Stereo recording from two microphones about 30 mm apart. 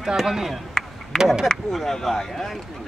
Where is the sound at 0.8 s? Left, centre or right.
Centre.